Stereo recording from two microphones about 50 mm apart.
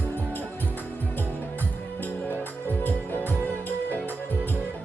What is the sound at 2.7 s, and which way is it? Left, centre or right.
Music, left.